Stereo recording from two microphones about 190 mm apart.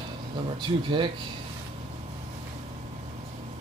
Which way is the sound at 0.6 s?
25° right (ahead or behind).